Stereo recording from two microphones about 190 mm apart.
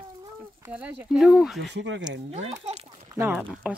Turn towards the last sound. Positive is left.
turn(degrees=0)  # may be behind; listen again after turning